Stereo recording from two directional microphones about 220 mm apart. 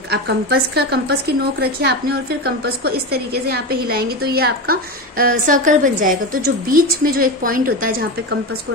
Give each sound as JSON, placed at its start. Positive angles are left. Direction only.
{"t": 0.1, "sound": "a woman's voice", "side_deg": -50}